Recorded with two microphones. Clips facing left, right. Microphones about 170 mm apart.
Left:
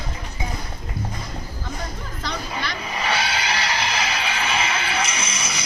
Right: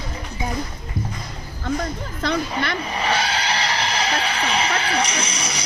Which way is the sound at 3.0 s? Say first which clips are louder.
Right 1 dB; 30° right (ahead or behind).